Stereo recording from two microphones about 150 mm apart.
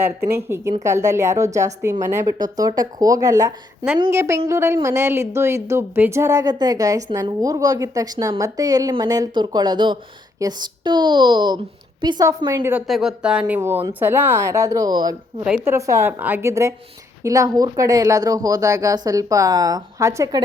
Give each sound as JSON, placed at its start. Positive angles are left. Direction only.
{"t": 0.0, "sound": "speech", "side_deg": -15}
{"t": 12.9, "sound": "speech", "side_deg": -5}